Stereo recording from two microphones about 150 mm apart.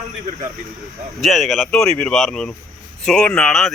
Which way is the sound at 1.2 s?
Centre (ahead or behind).